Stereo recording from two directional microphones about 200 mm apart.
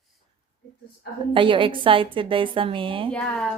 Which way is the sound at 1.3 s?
25° right (ahead or behind).